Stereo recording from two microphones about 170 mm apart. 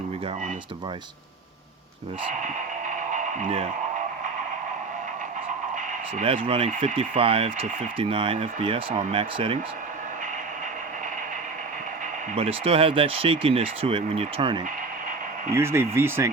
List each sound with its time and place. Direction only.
2.3 s radio: 50° right (ahead or behind)
6.2 s speech: 35° right (ahead or behind)
12.3 s speech: 35° right (ahead or behind)
15.5 s speech: 15° right (ahead or behind)